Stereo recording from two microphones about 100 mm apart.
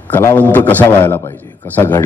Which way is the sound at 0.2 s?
20° left (ahead or behind).